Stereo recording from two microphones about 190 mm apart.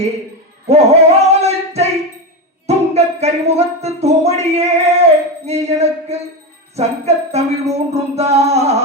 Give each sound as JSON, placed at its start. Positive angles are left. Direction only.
{"t": 0.7, "sound": "music", "side_deg": -35}
{"t": 2.6, "sound": "speech", "side_deg": -35}
{"t": 5.5, "sound": "music", "side_deg": -35}